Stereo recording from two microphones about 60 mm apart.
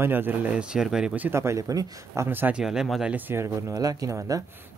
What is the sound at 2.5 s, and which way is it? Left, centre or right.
Speech, centre.